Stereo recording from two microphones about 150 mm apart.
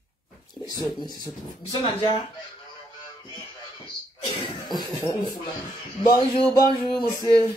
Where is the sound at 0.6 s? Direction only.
25° left (ahead or behind).